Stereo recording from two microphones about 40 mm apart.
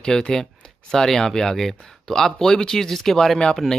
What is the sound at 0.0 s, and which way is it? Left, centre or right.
Speech, centre.